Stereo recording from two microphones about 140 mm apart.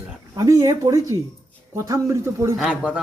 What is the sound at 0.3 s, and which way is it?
A man's voice, 25° right (ahead or behind).